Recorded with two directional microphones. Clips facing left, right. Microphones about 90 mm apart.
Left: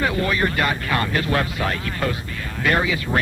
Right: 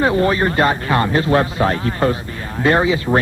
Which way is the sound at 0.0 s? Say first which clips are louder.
Right 6 dB; 30° right (ahead or behind).